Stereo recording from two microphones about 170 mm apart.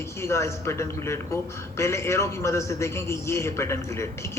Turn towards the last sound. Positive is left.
turn(degrees=15)  # may be behind; listen again after turning